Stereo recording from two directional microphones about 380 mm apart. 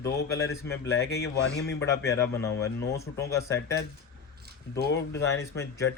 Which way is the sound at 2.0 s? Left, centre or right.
Centre.